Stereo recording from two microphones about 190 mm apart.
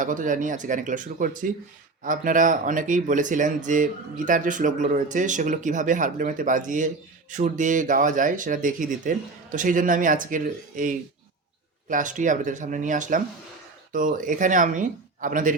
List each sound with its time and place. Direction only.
0.0 s speech: 45° right (ahead or behind)